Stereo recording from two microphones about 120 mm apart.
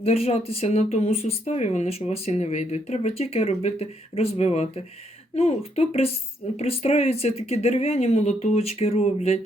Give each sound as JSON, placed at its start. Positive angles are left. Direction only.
{"t": 0.0, "sound": "speech", "side_deg": 60}